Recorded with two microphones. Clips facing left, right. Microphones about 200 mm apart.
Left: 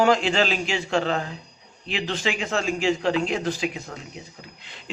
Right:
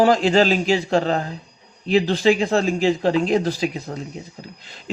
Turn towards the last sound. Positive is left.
turn(degrees=-40)  # may be behind; listen again after turning